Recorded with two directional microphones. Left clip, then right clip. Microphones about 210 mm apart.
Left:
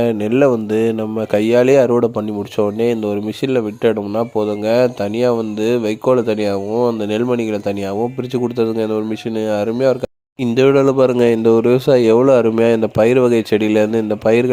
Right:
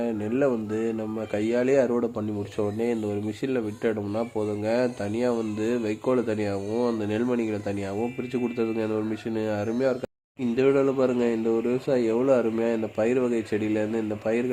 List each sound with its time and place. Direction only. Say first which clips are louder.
0.0 s speech: left 11 dB; 40° left (ahead or behind)